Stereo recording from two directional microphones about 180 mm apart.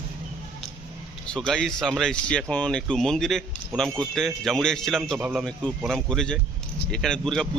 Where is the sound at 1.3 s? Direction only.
5° left (ahead or behind).